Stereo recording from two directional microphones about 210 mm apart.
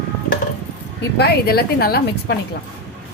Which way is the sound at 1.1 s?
50° left (ahead or behind).